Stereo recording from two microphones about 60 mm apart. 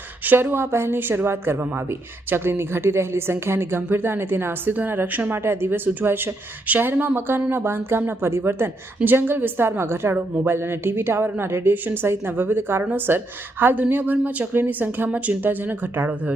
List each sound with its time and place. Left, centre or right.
0.3 s a woman's voice: right
10.2 s a woman's voice: right
10.5 s a woman's voice: right